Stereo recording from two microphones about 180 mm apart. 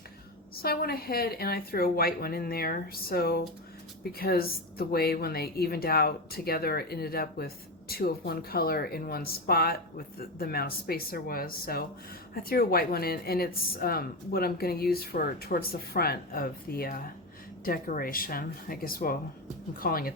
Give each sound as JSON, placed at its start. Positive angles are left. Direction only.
{"t": 0.5, "sound": "a woman's voice", "side_deg": 55}